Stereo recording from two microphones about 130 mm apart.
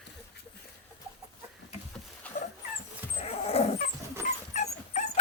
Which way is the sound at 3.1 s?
50° left (ahead or behind).